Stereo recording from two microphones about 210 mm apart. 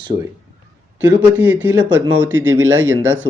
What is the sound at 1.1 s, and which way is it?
Speech, 10° right (ahead or behind).